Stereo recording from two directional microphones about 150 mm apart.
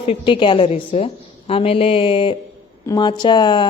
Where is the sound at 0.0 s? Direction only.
40° left (ahead or behind).